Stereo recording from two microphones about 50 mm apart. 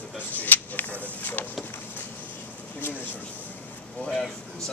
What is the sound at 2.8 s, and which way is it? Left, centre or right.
Speech, left.